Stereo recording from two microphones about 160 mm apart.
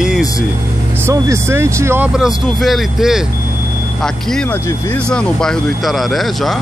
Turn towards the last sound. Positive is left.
turn(degrees=0)  # may be behind; listen again after turning